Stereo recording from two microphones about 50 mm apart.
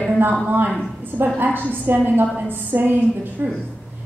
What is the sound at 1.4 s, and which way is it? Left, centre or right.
A woman's voice, right.